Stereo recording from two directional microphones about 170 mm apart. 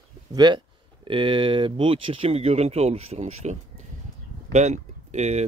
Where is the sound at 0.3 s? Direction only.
25° right (ahead or behind).